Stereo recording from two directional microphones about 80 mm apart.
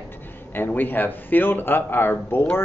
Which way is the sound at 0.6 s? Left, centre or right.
Left.